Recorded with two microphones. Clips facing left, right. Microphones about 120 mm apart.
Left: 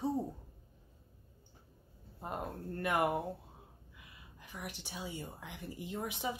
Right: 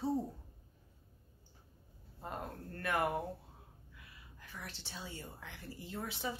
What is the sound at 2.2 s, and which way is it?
Speech, 20° left (ahead or behind).